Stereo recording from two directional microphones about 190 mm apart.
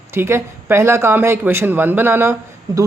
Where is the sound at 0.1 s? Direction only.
15° right (ahead or behind).